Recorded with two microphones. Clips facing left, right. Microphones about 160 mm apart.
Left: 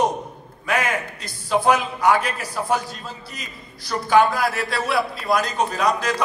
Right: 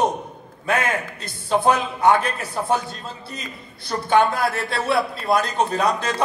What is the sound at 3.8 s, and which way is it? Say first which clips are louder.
A man's voice: left 1 dB; 25° right (ahead or behind).